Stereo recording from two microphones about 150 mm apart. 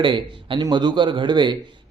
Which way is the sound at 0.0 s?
35° right (ahead or behind).